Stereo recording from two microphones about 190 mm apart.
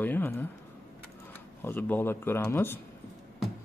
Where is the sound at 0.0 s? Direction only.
10° left (ahead or behind).